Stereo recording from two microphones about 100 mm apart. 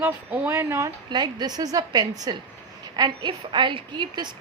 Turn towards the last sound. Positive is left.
turn(degrees=-50)  # may be behind; listen again after turning